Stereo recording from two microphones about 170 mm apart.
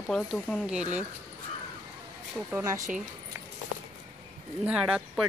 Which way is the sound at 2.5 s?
15° right (ahead or behind).